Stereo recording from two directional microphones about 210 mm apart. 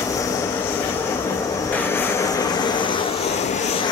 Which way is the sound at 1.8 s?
10° left (ahead or behind).